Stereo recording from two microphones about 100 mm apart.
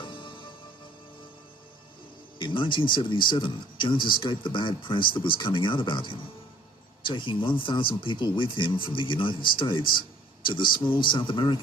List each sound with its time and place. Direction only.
0.0 s music: 55° left (ahead or behind)
2.4 s speech: 55° left (ahead or behind)